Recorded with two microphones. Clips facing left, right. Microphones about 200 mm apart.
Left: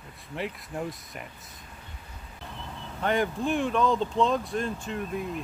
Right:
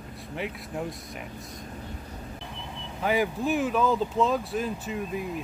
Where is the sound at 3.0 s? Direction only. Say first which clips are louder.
Right 1 dB; 5° right (ahead or behind).